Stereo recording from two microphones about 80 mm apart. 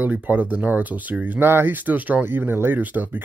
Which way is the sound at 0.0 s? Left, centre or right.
Right.